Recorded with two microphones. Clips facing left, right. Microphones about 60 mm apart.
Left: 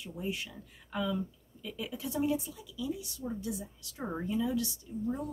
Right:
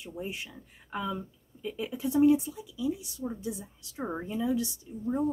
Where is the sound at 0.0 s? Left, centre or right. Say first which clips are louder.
Even; right.